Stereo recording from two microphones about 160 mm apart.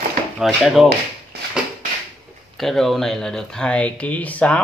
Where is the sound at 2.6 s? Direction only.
Centre (ahead or behind).